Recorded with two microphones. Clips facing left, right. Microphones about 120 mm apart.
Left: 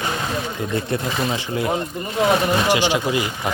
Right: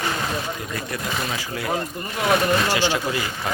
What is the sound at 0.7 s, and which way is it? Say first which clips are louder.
Speech: left 5 dB; 30° left (ahead or behind).